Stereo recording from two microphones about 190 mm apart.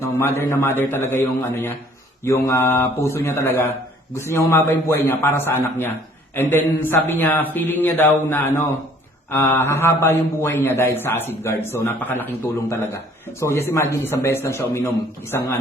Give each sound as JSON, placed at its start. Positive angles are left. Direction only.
{"t": 0.2, "sound": "a man's voice", "side_deg": 10}